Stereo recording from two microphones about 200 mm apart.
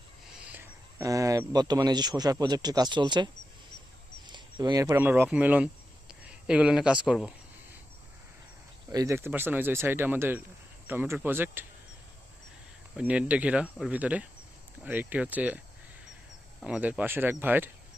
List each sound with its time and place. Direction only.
0.4 s speech: 10° right (ahead or behind)
4.3 s speech: 20° right (ahead or behind); by 7.3 s 5° right (ahead or behind)
8.9 s speech: 15° right (ahead or behind)
13.0 s speech: 5° right (ahead or behind)